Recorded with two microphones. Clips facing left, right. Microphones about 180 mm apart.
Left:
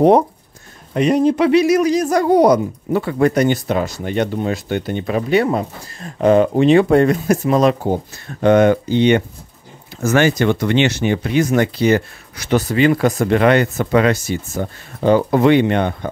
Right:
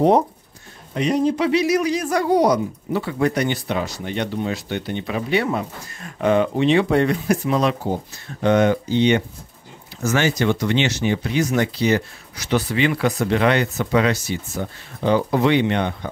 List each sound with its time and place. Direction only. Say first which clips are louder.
0.9 s speech: left 5 dB; 55° left (ahead or behind)